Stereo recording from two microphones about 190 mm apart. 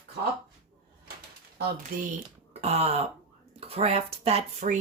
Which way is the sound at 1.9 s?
50° right (ahead or behind).